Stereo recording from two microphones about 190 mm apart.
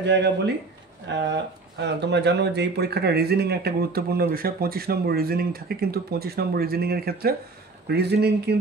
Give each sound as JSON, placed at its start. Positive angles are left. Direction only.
{"t": 0.0, "sound": "speech", "side_deg": -65}